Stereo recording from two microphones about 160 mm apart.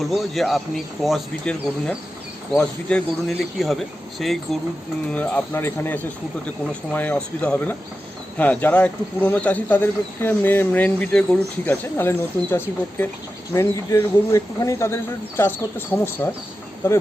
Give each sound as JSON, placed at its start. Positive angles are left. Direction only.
{"t": 0.0, "sound": "speech", "side_deg": 0}